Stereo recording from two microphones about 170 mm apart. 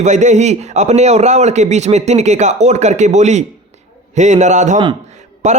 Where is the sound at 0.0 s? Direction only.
45° right (ahead or behind).